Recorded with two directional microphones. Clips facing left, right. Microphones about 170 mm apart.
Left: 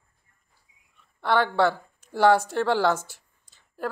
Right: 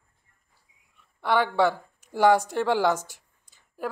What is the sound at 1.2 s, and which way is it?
Speech, 10° right (ahead or behind).